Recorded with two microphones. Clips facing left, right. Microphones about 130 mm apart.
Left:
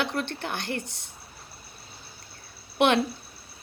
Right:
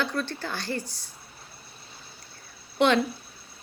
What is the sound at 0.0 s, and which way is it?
A woman's voice, 20° left (ahead or behind).